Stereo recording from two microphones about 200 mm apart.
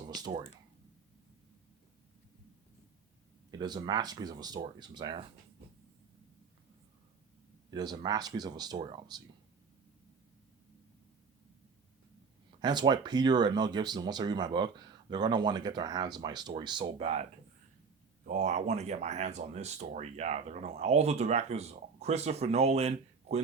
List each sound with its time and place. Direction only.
0.0 s speech: 20° right (ahead or behind)
3.5 s speech: 20° right (ahead or behind)
7.7 s speech: 20° right (ahead or behind)
12.5 s speech: 20° right (ahead or behind)
18.3 s speech: 35° right (ahead or behind)